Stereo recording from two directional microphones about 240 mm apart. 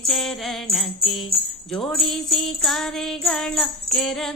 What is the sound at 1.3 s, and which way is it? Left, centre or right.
Jingle bell, right.